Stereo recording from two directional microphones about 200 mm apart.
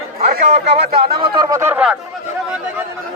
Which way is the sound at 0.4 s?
30° right (ahead or behind).